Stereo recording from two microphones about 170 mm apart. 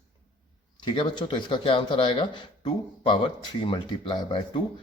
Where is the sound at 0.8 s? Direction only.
25° left (ahead or behind).